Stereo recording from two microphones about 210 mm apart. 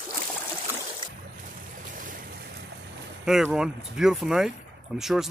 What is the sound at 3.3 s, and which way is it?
Speech, 5° right (ahead or behind).